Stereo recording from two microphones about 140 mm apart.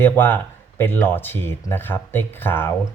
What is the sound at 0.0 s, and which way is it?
Speech, 15° left (ahead or behind).